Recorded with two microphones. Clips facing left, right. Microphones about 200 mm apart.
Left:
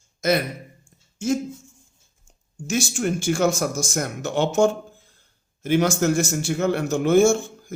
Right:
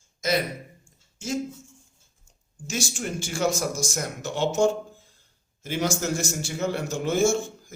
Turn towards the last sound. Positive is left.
turn(degrees=55)  # may be behind; listen again after turning